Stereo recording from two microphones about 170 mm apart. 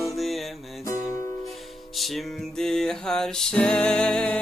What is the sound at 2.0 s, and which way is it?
Music, centre (ahead or behind).